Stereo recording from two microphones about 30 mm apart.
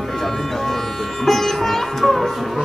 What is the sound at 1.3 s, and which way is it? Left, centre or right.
Music, centre.